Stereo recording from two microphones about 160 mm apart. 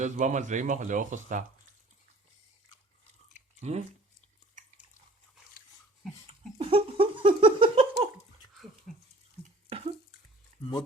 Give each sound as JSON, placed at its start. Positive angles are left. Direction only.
{"t": 0.0, "sound": "speech", "side_deg": -50}
{"t": 3.6, "sound": "speech", "side_deg": -45}
{"t": 6.6, "sound": "giggle", "side_deg": -35}
{"t": 8.4, "sound": "dog", "side_deg": 20}
{"t": 9.6, "sound": "bathtub", "side_deg": -35}